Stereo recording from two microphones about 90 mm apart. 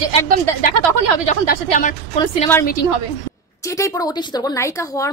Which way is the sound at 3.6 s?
35° left (ahead or behind).